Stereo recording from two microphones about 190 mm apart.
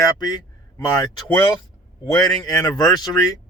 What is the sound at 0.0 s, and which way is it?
Speech, 20° left (ahead or behind).